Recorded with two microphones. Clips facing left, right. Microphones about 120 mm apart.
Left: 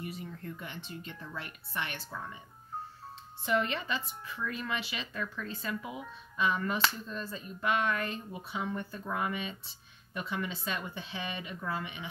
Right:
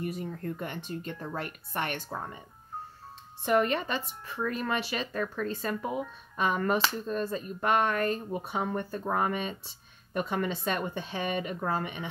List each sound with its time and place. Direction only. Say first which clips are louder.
0.0 s speech: right 7 dB; 50° right (ahead or behind)
3.4 s speech: right 5 dB; 50° right (ahead or behind)